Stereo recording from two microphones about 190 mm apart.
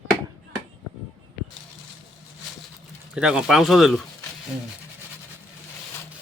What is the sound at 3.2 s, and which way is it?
Speech, 5° right (ahead or behind).